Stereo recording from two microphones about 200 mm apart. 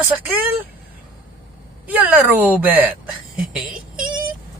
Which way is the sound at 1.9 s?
10° right (ahead or behind).